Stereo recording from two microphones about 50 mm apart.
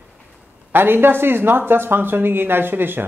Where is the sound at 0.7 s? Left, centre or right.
Right.